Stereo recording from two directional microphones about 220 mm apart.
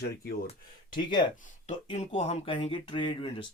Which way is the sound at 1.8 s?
25° left (ahead or behind).